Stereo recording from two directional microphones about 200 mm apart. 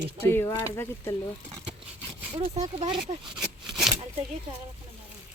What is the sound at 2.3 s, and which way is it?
Speech, 25° right (ahead or behind).